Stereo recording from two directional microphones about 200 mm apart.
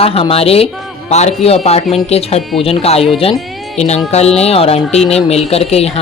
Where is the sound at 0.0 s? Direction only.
30° left (ahead or behind).